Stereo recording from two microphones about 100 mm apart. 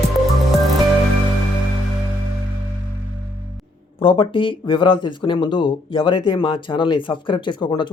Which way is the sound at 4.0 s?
60° left (ahead or behind).